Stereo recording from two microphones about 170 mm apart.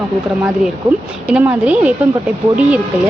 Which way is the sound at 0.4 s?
5° right (ahead or behind).